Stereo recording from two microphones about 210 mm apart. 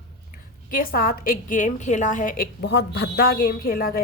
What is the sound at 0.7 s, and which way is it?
A woman's voice, 45° left (ahead or behind).